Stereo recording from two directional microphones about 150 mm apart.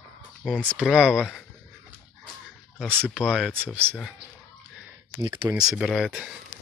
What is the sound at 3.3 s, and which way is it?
Speech, 5° right (ahead or behind).